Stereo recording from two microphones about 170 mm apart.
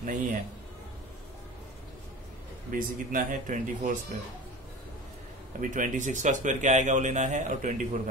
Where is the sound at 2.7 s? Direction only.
55° right (ahead or behind).